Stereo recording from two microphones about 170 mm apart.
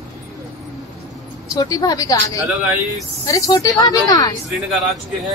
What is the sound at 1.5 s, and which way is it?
Speech, 20° left (ahead or behind).